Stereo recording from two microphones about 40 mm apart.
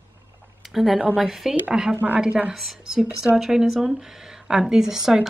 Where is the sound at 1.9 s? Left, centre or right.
Right.